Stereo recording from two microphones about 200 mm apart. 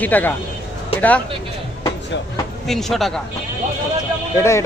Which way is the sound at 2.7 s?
Centre (ahead or behind).